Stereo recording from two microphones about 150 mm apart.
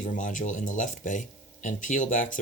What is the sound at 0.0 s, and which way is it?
Speech, 60° left (ahead or behind).